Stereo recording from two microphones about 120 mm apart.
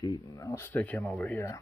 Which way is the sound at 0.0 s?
30° left (ahead or behind).